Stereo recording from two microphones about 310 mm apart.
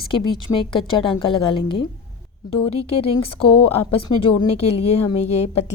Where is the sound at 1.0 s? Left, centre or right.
Centre.